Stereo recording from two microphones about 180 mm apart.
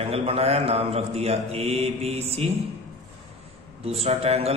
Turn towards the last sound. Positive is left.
turn(degrees=-35)  # may be behind; listen again after turning